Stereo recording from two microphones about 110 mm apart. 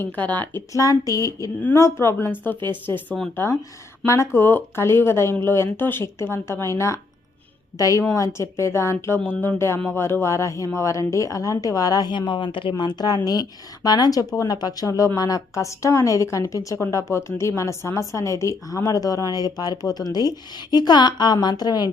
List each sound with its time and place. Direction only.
0.0 s speech: 15° left (ahead or behind)
0.7 s a woman's voice: 30° left (ahead or behind)